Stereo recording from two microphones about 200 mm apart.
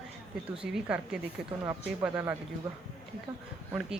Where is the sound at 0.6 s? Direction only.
5° right (ahead or behind).